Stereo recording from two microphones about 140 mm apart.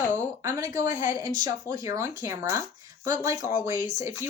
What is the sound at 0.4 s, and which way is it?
Speech, 20° right (ahead or behind).